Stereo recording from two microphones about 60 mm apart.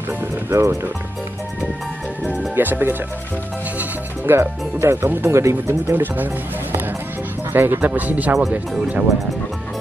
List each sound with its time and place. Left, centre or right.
0.5 s speech: right
2.5 s speech: right
4.3 s speech: right
5.3 s speech: right
7.5 s speech: right
8.4 s speech: centre